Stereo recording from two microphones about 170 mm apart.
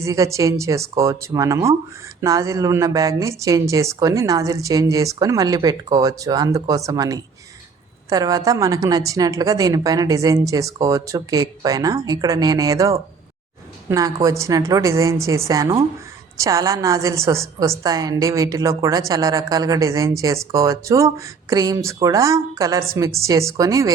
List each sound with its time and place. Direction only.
0.0 s a woman's voice: 20° right (ahead or behind)